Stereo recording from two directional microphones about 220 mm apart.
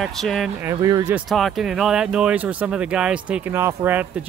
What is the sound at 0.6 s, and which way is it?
Speech, 15° right (ahead or behind).